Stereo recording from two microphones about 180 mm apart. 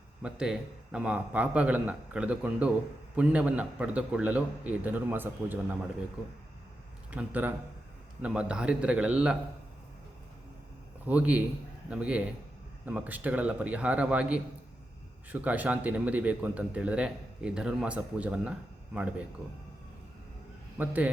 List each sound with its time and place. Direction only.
0.2 s a man's voice: 5° right (ahead or behind)
7.1 s a man's voice: 10° right (ahead or behind)
11.0 s a man's voice: 10° right (ahead or behind)
20.7 s a man's voice: 10° right (ahead or behind)